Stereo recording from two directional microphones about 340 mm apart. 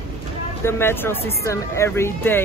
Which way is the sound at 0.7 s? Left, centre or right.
Centre.